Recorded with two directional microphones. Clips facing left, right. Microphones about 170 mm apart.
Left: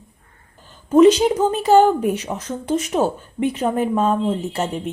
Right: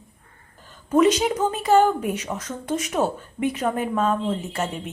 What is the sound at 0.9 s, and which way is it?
A woman's voice, 30° left (ahead or behind).